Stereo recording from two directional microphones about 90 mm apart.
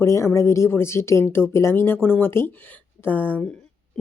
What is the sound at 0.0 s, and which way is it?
A woman's voice, 30° left (ahead or behind).